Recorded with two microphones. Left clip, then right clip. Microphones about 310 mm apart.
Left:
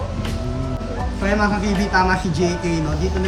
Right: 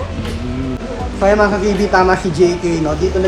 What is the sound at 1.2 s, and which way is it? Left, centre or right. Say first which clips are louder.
Speech: right 8 dB; centre.